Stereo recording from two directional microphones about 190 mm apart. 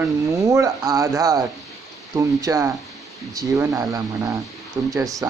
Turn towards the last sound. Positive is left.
turn(degrees=-15)  # may be behind; listen again after turning